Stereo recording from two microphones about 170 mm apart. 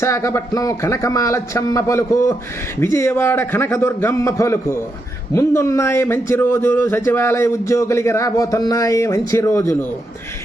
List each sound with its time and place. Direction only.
0.0 s speech: 15° left (ahead or behind)